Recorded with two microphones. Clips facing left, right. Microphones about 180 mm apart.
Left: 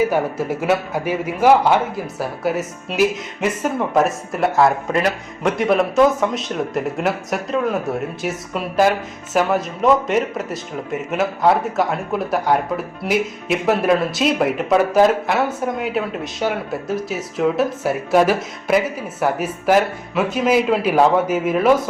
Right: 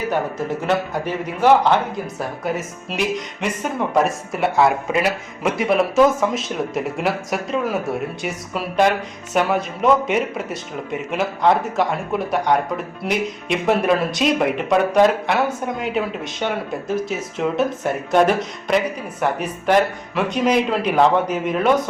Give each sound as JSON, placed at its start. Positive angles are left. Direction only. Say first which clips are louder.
{"t": 0.1, "sound": "a man's voice", "louder": "left 2 dB", "side_deg": 10}